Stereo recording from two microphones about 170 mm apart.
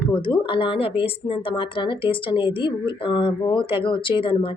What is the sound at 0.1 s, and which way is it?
Speech, 30° left (ahead or behind).